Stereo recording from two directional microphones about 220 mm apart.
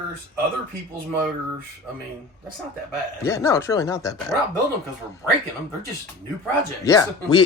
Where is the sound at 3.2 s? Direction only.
15° left (ahead or behind).